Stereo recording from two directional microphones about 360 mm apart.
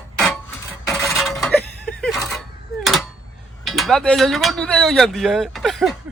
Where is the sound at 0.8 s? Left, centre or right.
Centre.